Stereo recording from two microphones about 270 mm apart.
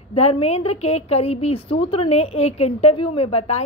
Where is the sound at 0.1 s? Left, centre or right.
Left.